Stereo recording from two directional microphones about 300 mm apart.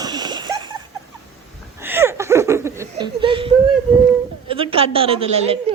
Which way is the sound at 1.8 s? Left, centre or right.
Centre.